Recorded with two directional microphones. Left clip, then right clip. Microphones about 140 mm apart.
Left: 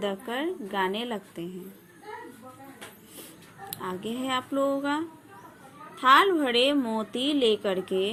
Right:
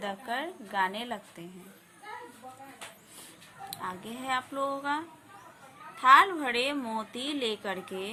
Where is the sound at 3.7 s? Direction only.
20° left (ahead or behind).